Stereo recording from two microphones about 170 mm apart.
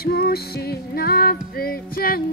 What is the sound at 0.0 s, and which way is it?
Music, 65° left (ahead or behind).